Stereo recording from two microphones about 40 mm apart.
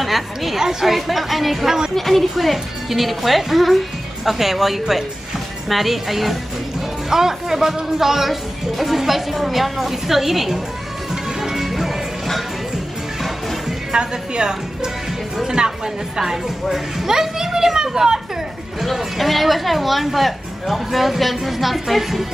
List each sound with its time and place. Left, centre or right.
0.0 s a woman's voice: centre
11.4 s music: centre
13.9 s a woman's voice: right; by 22.2 s centre